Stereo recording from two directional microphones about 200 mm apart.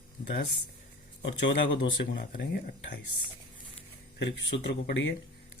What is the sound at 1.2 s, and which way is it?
Speech, 60° left (ahead or behind).